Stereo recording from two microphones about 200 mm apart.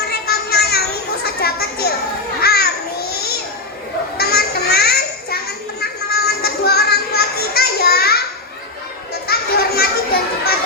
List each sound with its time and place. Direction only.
0.1 s children playing: 50° left (ahead or behind)
2.4 s babbling: 50° left (ahead or behind)
4.2 s a sound: 50° left (ahead or behind)
6.2 s music: 50° left (ahead or behind)
9.2 s children playing: 50° left (ahead or behind)